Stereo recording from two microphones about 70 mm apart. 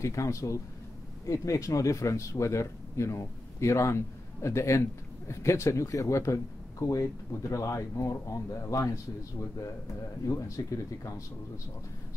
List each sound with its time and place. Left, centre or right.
0.0 s speech: left
10.2 s speech: left